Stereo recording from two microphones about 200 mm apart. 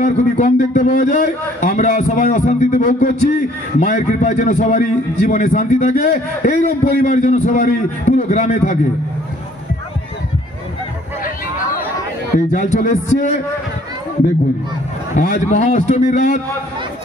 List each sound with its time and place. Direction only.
0.0 s a man's voice: 35° left (ahead or behind)
12.4 s a man's voice: 35° left (ahead or behind)
15.1 s a man's voice: 40° left (ahead or behind)